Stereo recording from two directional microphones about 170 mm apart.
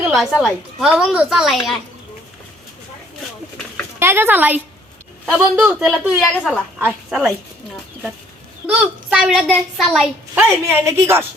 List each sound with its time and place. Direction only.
0.0 s a woman's voice: centre (ahead or behind)
4.0 s a woman's voice: 15° right (ahead or behind)
5.2 s a woman's voice: centre (ahead or behind)
8.6 s a woman's voice: 5° right (ahead or behind)
10.3 s a woman's voice: 15° right (ahead or behind)